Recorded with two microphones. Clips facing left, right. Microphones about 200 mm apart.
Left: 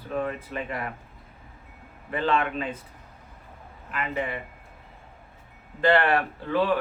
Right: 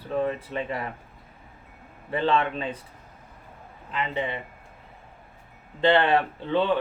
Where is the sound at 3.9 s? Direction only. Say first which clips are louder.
Right 1 dB; 25° right (ahead or behind).